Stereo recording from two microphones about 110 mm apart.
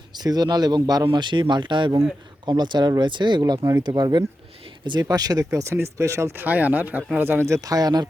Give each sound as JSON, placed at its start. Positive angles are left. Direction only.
{"t": 0.1, "sound": "speech", "side_deg": -40}